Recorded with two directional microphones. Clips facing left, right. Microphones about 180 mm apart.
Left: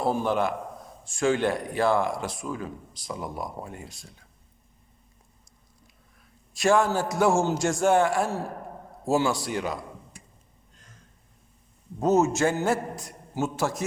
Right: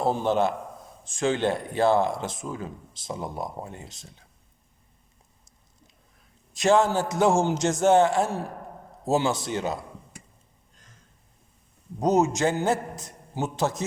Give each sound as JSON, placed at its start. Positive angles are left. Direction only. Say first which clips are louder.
{"t": 0.0, "sound": "speech", "louder": "right 2 dB", "side_deg": -25}
{"t": 6.5, "sound": "speech", "louder": "right 1 dB", "side_deg": -20}
{"t": 11.9, "sound": "speech", "louder": "even", "side_deg": -15}